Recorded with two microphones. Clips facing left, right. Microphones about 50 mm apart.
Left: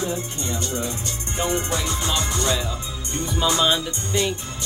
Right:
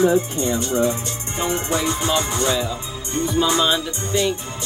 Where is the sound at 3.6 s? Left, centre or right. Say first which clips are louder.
Right 1 dB; centre.